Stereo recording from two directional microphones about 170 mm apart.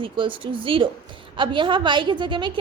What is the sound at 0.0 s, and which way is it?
A woman's voice, 30° right (ahead or behind).